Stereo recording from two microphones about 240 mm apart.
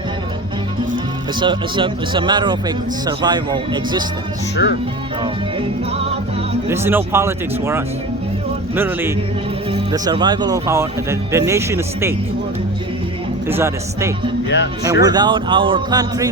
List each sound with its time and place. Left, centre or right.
1.4 s speech: centre
4.6 s speech: left
6.7 s speech: centre
13.5 s speech: centre